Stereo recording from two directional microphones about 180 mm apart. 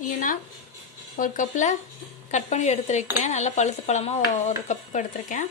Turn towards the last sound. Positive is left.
turn(degrees=45)  # may be behind; listen again after turning